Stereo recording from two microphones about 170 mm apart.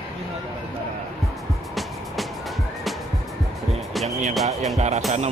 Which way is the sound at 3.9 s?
Centre (ahead or behind).